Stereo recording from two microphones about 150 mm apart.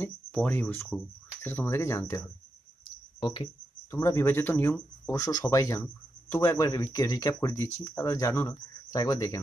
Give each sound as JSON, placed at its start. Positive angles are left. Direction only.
{"t": 0.0, "sound": "speech", "side_deg": 10}
{"t": 3.2, "sound": "speech", "side_deg": 35}
{"t": 3.9, "sound": "speech", "side_deg": 20}